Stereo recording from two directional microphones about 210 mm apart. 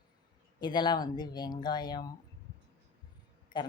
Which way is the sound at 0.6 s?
20° left (ahead or behind).